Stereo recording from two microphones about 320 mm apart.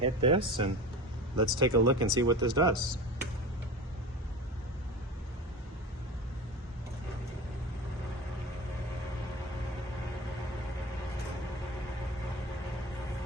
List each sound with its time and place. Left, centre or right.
0.0 s speech: centre